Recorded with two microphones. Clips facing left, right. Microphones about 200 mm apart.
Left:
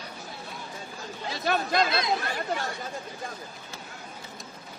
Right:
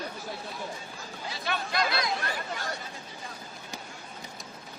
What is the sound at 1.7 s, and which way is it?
Chatter, 20° left (ahead or behind).